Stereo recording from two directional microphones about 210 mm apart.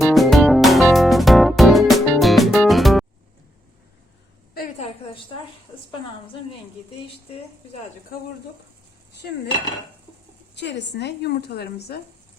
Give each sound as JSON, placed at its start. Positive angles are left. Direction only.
{"t": 0.0, "sound": "music", "side_deg": 0}
{"t": 4.5, "sound": "a sound", "side_deg": 40}
{"t": 10.5, "sound": "a woman's voice", "side_deg": 55}